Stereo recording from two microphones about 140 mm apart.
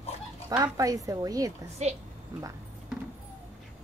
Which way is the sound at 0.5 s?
30° right (ahead or behind).